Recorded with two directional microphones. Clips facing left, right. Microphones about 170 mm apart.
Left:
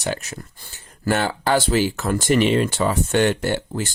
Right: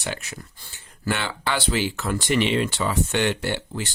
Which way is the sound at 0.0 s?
40° left (ahead or behind).